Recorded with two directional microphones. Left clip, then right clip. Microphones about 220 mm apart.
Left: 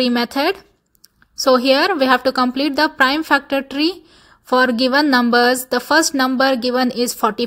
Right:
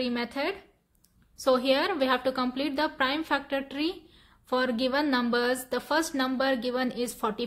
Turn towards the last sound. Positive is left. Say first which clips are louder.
# left 12 dB
turn(degrees=35)  # may be behind; listen again after turning